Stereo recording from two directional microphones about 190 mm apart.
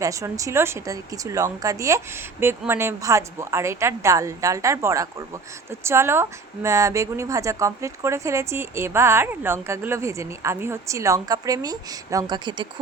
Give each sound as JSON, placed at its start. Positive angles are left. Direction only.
{"t": 0.0, "sound": "speech", "side_deg": -15}